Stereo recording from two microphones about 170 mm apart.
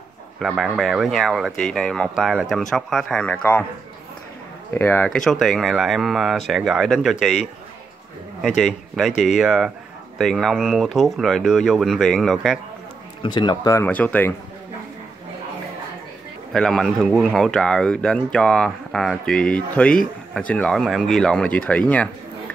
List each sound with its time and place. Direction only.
0.4 s speech: centre (ahead or behind)
4.7 s speech: 10° left (ahead or behind)
8.4 s a man's voice: centre (ahead or behind)
13.2 s speech: 25° left (ahead or behind)
13.8 s speech: 10° left (ahead or behind)
16.5 s speech: 5° left (ahead or behind)